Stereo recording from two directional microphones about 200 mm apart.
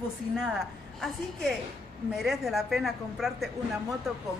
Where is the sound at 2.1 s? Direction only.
Centre (ahead or behind).